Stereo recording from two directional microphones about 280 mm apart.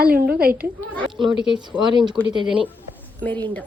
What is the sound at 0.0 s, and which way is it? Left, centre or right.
A woman's voice, centre.